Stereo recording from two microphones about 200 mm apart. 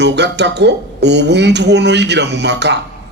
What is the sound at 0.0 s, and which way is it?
A man's voice, 60° right (ahead or behind).